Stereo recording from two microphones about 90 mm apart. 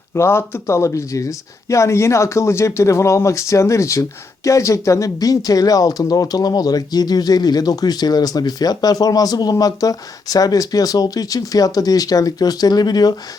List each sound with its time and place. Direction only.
0.1 s speech: 30° left (ahead or behind); by 13.1 s 50° left (ahead or behind)